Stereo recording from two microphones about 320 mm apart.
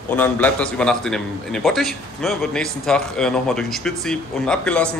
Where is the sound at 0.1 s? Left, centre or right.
Centre.